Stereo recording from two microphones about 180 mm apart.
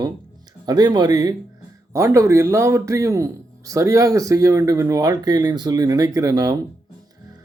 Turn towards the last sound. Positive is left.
turn(degrees=-20)  # may be behind; listen again after turning